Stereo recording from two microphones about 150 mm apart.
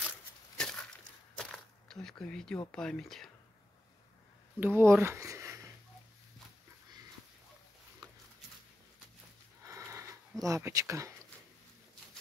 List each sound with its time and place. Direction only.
0.6 s a sound: 5° left (ahead or behind)
2.7 s speech: 5° left (ahead or behind)
4.6 s speech: 15° right (ahead or behind)
8.0 s pig: 25° right (ahead or behind)
9.7 s sniff: 20° right (ahead or behind)
10.4 s speech: 20° right (ahead or behind)